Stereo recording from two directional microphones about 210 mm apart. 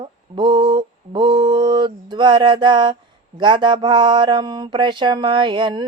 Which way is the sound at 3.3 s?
20° right (ahead or behind).